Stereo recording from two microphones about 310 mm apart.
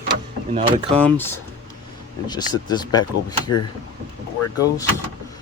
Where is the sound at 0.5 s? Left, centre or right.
Centre.